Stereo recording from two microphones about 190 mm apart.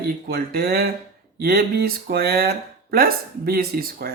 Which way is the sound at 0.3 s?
55° right (ahead or behind).